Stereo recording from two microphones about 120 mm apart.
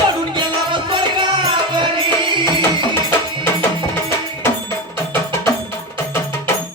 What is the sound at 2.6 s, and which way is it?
Music, 20° left (ahead or behind).